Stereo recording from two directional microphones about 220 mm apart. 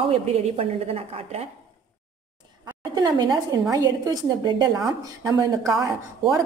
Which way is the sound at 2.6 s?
20° right (ahead or behind).